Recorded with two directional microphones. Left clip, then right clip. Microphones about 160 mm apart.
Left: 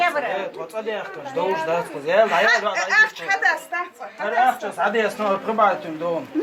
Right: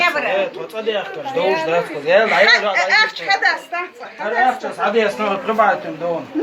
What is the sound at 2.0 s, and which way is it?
Speech, 25° left (ahead or behind).